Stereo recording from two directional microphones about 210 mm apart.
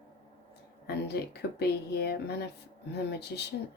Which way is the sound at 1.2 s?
50° left (ahead or behind).